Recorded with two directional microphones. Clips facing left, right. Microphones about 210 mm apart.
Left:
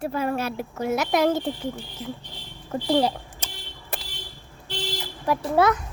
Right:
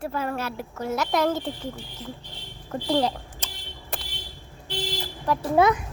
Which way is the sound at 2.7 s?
10° left (ahead or behind).